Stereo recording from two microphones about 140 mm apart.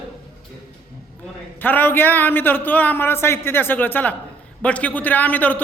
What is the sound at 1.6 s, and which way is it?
A man's voice, 15° left (ahead or behind).